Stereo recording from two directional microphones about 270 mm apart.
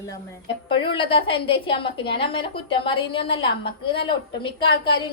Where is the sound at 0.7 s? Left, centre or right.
Centre.